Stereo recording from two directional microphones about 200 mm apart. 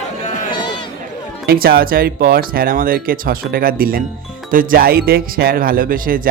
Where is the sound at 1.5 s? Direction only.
50° right (ahead or behind).